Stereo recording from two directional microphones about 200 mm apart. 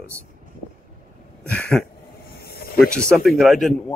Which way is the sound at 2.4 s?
50° left (ahead or behind).